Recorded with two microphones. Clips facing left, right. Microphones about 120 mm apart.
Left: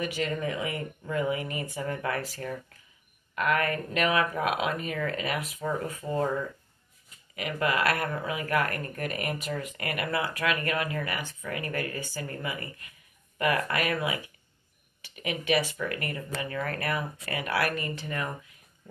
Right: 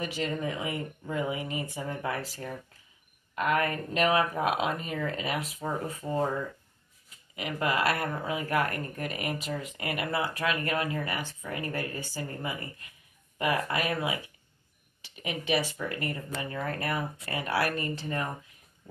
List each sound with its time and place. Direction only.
0.0 s speech: 25° right (ahead or behind)
7.3 s speech: 25° right (ahead or behind)